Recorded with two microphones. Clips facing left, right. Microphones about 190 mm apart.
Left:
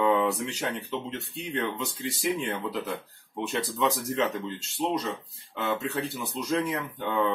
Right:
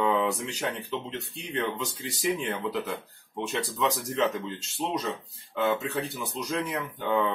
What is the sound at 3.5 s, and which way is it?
Speech, centre (ahead or behind).